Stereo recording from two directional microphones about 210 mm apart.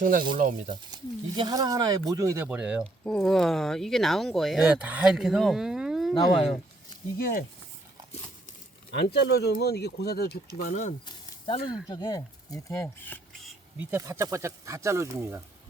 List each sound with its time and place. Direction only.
0.0 s speech: 40° right (ahead or behind)
0.7 s speech: 20° right (ahead or behind); by 6.1 s centre (ahead or behind)
7.2 s speech: 45° left (ahead or behind)
8.9 s speech: 50° left (ahead or behind)
11.0 s a sound: 25° left (ahead or behind)
11.9 s speech: 20° left (ahead or behind)
13.7 s speech: 15° right (ahead or behind)